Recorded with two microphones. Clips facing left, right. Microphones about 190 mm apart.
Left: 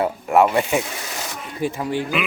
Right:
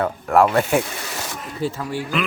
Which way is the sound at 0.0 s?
5° left (ahead or behind).